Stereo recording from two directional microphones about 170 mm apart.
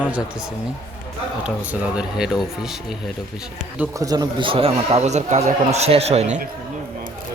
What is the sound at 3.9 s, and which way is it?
A man's voice, 20° right (ahead or behind).